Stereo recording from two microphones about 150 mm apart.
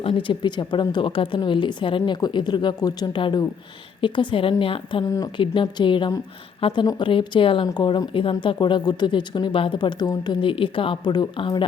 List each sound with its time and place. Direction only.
0.0 s speech: 35° left (ahead or behind)
5.0 s speech: 25° left (ahead or behind)